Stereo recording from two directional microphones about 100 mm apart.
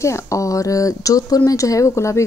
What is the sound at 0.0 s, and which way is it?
Speech, 30° left (ahead or behind).